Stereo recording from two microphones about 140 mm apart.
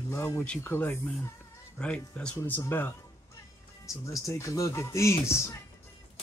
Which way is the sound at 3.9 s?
25° left (ahead or behind).